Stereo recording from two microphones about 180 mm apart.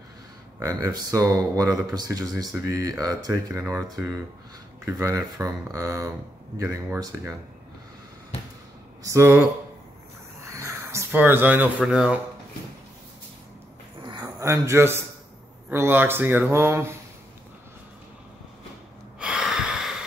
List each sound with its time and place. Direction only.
0.6 s speech: 20° right (ahead or behind)
9.0 s speech: 15° right (ahead or behind)
10.4 s speech: 15° right (ahead or behind)
14.2 s a man's voice: 15° right (ahead or behind)
19.1 s a sound: 5° right (ahead or behind)